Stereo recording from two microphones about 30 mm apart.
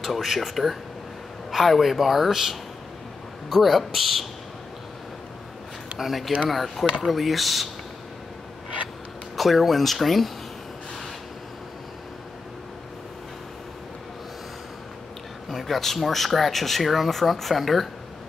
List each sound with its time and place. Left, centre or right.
0.0 s speech: centre
3.6 s speech: centre
5.9 s speech: centre
9.4 s speech: centre
15.5 s speech: centre